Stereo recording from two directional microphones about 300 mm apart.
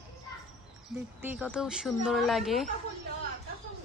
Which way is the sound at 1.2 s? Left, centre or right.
Centre.